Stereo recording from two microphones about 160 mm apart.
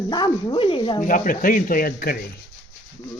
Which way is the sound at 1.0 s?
55° left (ahead or behind).